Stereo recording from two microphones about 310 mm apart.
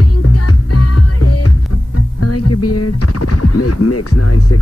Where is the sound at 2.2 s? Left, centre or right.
Left.